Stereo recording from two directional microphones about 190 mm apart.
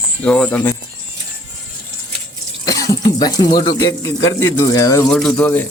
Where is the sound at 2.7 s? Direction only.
20° left (ahead or behind).